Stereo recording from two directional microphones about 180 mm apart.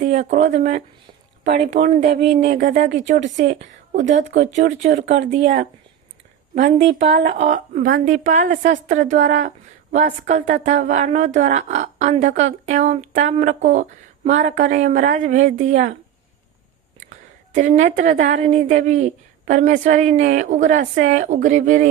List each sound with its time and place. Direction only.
0.0 s speech: 40° right (ahead or behind)
7.1 s speech: 50° right (ahead or behind)
17.5 s speech: 45° right (ahead or behind)